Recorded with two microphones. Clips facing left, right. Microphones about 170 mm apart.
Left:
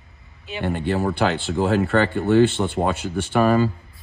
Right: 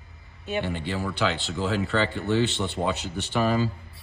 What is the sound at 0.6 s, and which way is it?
Speech, 50° left (ahead or behind).